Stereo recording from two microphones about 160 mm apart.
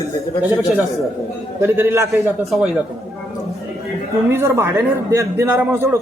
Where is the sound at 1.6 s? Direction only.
15° right (ahead or behind).